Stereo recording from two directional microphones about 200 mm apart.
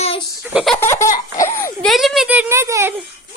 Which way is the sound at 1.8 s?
Centre (ahead or behind).